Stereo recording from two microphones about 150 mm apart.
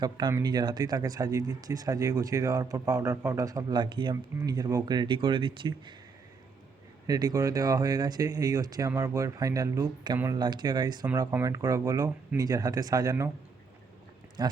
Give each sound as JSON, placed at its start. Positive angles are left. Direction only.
{"t": 0.0, "sound": "speech", "side_deg": -30}
{"t": 7.1, "sound": "speech", "side_deg": -25}
{"t": 14.4, "sound": "speech", "side_deg": -25}